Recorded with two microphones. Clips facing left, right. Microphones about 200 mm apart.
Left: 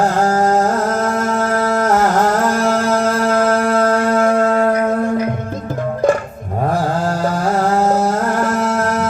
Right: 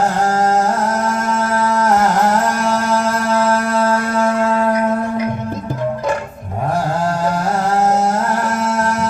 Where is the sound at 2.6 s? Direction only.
55° left (ahead or behind).